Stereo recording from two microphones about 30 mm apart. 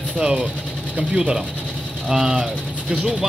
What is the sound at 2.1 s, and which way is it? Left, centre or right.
Speech, centre.